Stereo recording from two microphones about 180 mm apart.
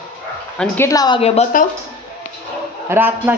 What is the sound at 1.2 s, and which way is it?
Speech, 35° left (ahead or behind).